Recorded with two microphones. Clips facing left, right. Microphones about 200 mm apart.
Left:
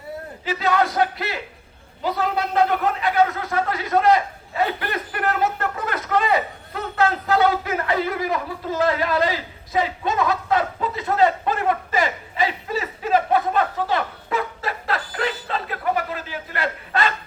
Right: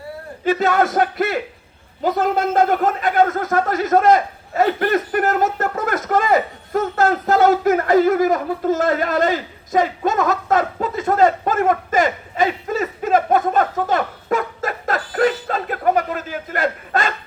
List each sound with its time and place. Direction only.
0.4 s a man's voice: 50° right (ahead or behind)